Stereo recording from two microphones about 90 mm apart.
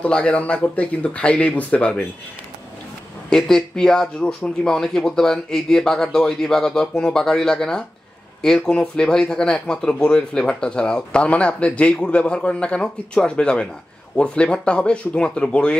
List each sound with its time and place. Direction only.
0.0 s speech: 15° left (ahead or behind)
3.3 s speech: 5° left (ahead or behind)